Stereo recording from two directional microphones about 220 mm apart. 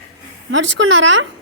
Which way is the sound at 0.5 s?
55° right (ahead or behind).